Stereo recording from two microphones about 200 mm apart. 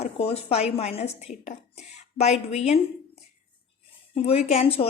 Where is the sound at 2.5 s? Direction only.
30° left (ahead or behind).